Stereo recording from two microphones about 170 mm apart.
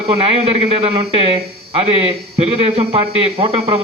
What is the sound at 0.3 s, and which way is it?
Speech, 35° right (ahead or behind).